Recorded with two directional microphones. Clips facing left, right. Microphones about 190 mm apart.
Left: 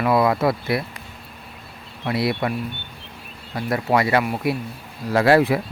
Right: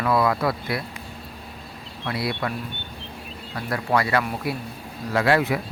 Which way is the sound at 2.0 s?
25° left (ahead or behind).